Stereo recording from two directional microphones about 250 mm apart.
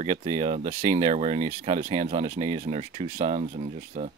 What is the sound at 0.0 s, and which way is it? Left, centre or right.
Speech, right.